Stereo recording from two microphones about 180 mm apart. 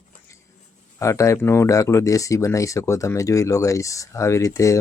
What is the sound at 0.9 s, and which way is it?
Speech, 15° left (ahead or behind).